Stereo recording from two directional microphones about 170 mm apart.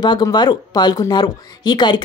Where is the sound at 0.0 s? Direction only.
25° left (ahead or behind).